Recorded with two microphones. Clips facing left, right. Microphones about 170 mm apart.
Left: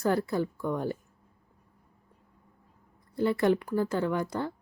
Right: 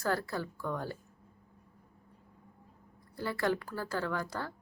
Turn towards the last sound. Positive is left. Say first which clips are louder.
# left 6 dB
turn(degrees=20)  # may be behind; listen again after turning